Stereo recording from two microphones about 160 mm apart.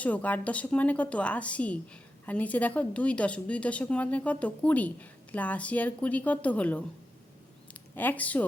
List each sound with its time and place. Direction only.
0.0 s a woman's voice: 10° left (ahead or behind)